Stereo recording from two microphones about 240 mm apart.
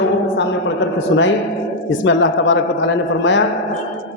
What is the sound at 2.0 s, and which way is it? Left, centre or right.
Speech, left.